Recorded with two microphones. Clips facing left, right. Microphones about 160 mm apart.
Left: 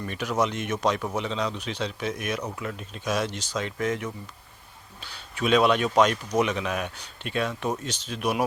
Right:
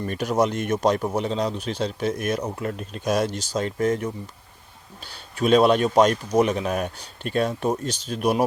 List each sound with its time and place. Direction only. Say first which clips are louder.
0.0 s speech: right 4 dB; 40° right (ahead or behind)
5.4 s speech: right 4 dB; 40° right (ahead or behind)